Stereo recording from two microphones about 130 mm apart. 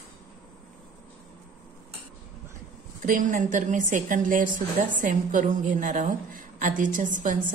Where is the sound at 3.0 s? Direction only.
90° right.